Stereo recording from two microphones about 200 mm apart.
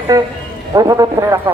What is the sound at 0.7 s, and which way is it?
Speech, 15° right (ahead or behind).